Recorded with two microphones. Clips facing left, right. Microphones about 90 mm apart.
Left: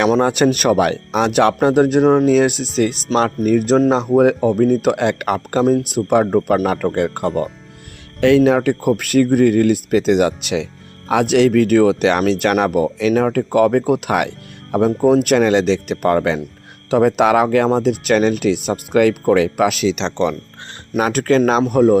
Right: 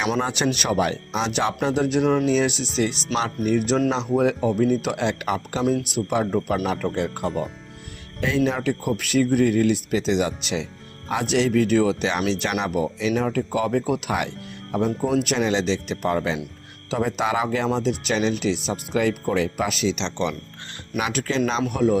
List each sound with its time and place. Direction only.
0.2 s speech: 50° left (ahead or behind)
5.6 s speech: 45° left (ahead or behind)
8.2 s speech: 65° left (ahead or behind)
14.8 s speech: 45° left (ahead or behind); by 20.1 s 65° left (ahead or behind)
20.1 s speech: 45° left (ahead or behind)